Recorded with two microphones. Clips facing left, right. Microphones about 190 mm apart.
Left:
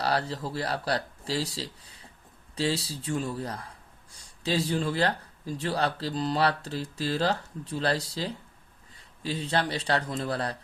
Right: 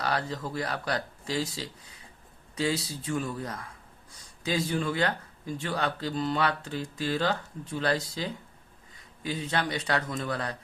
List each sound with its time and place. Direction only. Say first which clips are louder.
0.0 s speech: left 2 dB; 35° left (ahead or behind)
3.0 s speech: left 1 dB; 30° left (ahead or behind)